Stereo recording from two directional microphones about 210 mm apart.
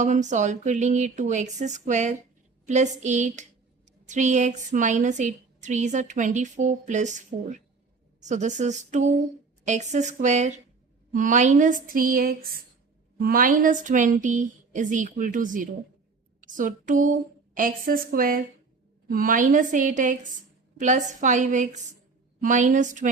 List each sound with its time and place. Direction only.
0.0 s a woman's voice: 35° right (ahead or behind)
8.2 s a woman's voice: 35° right (ahead or behind)